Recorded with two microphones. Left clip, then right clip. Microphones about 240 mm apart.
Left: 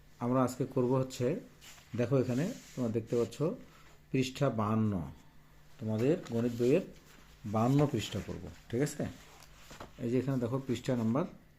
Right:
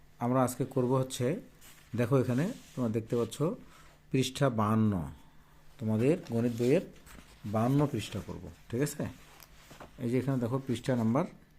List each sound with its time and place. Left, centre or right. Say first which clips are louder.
0.2 s speech: right 2 dB; centre
7.5 s speech: even; centre; by 11.3 s right